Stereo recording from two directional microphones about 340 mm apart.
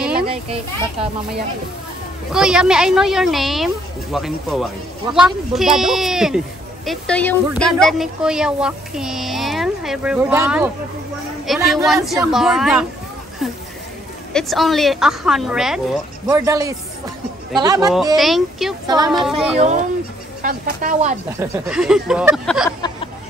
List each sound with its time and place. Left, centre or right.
2.3 s a woman's voice: centre
18.9 s speech: centre
19.1 s a woman's voice: centre
19.5 s speech: centre
21.3 s a woman's voice: centre